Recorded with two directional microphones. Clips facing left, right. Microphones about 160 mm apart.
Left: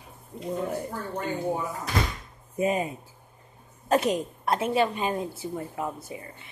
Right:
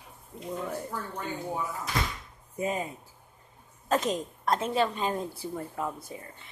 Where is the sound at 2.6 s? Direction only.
15° left (ahead or behind).